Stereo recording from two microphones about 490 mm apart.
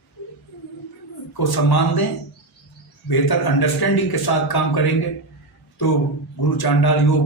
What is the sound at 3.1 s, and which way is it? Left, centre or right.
A man's voice, left.